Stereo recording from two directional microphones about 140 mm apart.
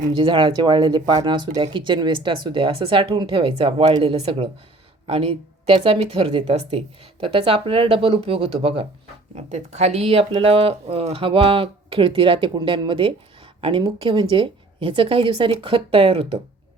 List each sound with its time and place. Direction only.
0.0 s speech: 35° right (ahead or behind)
9.3 s speech: 55° right (ahead or behind)